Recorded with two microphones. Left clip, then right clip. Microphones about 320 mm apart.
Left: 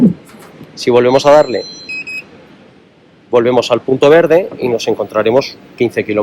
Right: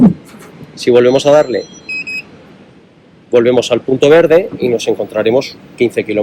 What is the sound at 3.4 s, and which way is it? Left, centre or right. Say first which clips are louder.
Speech: right 1 dB; left.